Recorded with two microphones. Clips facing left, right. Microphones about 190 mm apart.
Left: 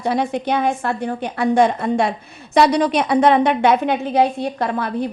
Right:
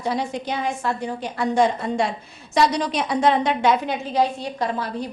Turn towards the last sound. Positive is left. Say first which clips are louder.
# left 4 dB
turn(degrees=55)  # may be behind; listen again after turning